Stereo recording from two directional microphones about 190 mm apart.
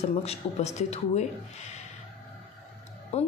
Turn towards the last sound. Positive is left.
turn(degrees=35)  # may be behind; listen again after turning